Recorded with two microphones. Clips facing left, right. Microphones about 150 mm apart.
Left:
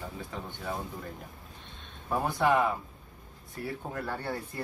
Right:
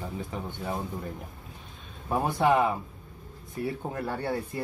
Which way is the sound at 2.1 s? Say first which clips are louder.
Right 2 dB; 20° right (ahead or behind).